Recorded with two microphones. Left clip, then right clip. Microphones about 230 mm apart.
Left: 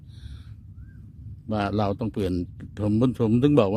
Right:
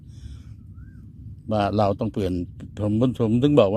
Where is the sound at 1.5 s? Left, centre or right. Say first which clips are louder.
Right 5 dB; centre.